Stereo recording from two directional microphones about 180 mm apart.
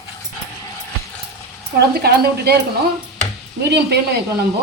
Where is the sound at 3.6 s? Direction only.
65° right (ahead or behind).